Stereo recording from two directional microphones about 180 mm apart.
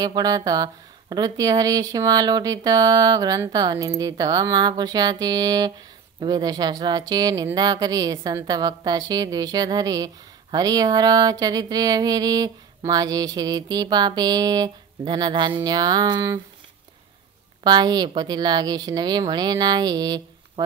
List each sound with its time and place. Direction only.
0.0 s speech: 20° right (ahead or behind)
17.6 s speech: 25° right (ahead or behind)